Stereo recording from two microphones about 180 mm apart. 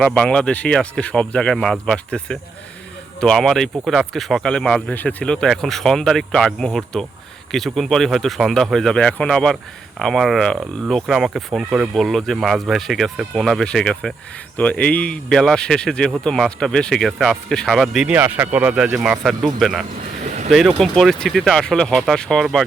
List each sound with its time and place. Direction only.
0.0 s speech: 5° left (ahead or behind)
20.2 s a sound: 40° right (ahead or behind)
20.5 s speech: centre (ahead or behind)